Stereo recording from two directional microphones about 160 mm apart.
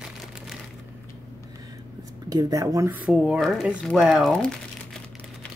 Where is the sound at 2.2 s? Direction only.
20° right (ahead or behind).